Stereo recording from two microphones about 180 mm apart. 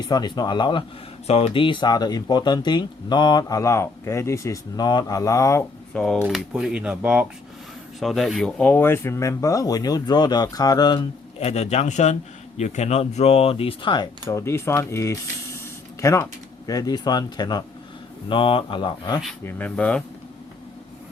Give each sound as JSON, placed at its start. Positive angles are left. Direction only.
{"t": 0.0, "sound": "speech", "side_deg": 20}
{"t": 5.9, "sound": "speech", "side_deg": 5}
{"t": 6.2, "sound": "speech", "side_deg": -5}
{"t": 11.3, "sound": "speech", "side_deg": 35}
{"t": 19.5, "sound": "speech", "side_deg": 10}